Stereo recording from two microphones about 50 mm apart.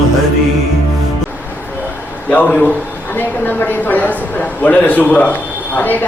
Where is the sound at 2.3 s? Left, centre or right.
Left.